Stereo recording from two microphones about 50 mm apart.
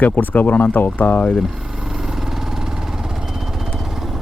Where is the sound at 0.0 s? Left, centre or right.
Left.